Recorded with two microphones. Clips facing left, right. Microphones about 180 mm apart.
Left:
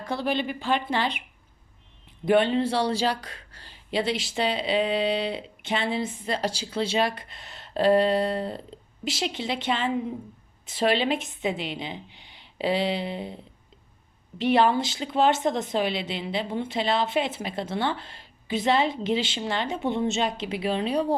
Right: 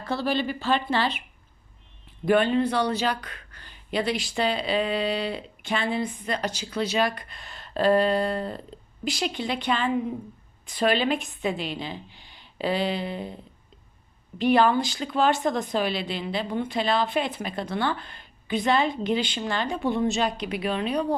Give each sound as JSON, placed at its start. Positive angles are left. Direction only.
{"t": 0.0, "sound": "speech", "side_deg": 15}
{"t": 2.2, "sound": "speech", "side_deg": 25}